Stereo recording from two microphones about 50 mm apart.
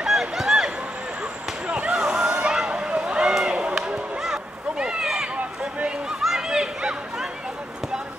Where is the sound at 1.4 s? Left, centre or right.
Centre.